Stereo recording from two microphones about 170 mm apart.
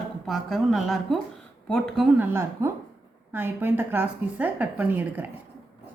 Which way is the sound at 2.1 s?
15° right (ahead or behind).